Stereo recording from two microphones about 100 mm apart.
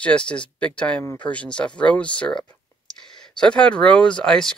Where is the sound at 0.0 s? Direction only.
10° left (ahead or behind).